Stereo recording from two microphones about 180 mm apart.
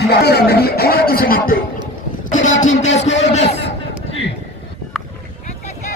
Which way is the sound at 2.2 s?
45° left (ahead or behind).